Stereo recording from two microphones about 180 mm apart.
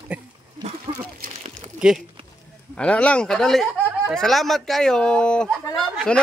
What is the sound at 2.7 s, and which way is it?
Speech, 5° left (ahead or behind).